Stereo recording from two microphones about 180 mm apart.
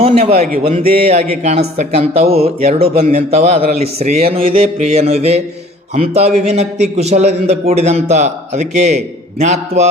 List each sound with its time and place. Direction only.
0.0 s a man's voice: 35° right (ahead or behind)